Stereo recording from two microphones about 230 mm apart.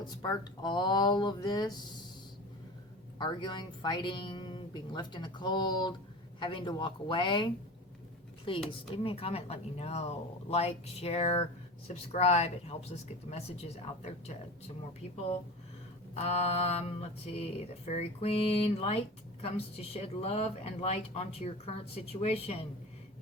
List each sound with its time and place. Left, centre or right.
0.0 s speech: centre
3.2 s speech: centre